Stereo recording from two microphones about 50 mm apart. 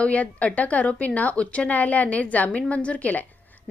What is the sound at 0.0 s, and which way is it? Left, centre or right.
A woman's voice, left.